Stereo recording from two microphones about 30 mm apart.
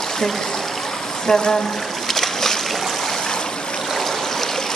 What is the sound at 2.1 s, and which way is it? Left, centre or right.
Boat, centre.